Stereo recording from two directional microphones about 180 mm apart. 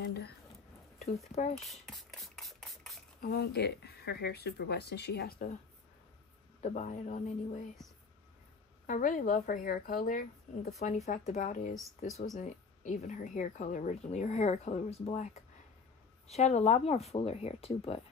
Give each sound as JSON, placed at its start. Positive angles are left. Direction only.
{"t": 0.0, "sound": "a sound", "side_deg": 65}
{"t": 1.6, "sound": "speech", "side_deg": 0}
{"t": 2.0, "sound": "a sound", "side_deg": 0}
{"t": 3.2, "sound": "speech", "side_deg": 60}
{"t": 6.6, "sound": "speech", "side_deg": 45}
{"t": 8.8, "sound": "speech", "side_deg": 45}